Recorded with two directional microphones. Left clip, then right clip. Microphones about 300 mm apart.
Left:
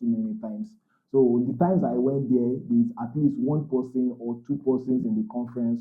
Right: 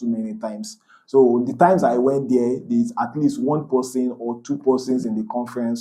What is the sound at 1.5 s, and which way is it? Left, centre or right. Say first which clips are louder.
Speech: right 9 dB; centre.